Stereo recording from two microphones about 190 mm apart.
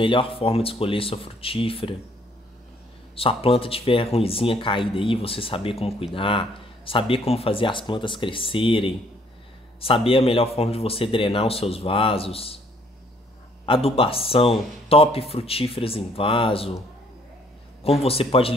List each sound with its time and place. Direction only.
0.0 s a man's voice: 25° left (ahead or behind)
3.2 s a man's voice: 30° left (ahead or behind)
13.7 s a man's voice: 30° left (ahead or behind)
17.8 s speech: 30° left (ahead or behind)